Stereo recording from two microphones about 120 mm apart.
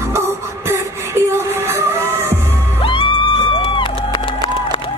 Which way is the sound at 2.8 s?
45° left (ahead or behind).